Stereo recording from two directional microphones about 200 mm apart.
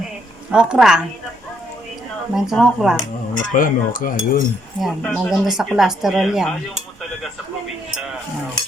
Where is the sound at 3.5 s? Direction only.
40° left (ahead or behind).